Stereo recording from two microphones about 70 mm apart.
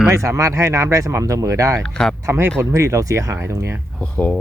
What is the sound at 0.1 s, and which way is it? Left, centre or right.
Speech, right.